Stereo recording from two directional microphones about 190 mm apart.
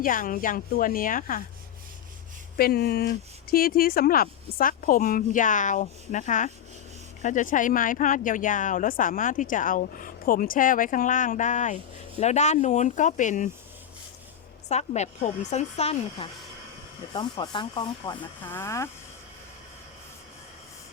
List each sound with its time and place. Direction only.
0.0 s speech: 45° left (ahead or behind)
2.6 s speech: 55° left (ahead or behind)
14.7 s speech: 35° left (ahead or behind)
17.2 s speech: 20° left (ahead or behind)
18.4 s speech: 15° left (ahead or behind)